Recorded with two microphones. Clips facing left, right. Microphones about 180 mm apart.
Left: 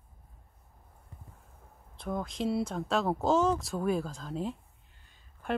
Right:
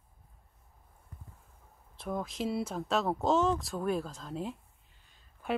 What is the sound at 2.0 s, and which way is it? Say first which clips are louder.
Speech: left 2 dB; centre (ahead or behind).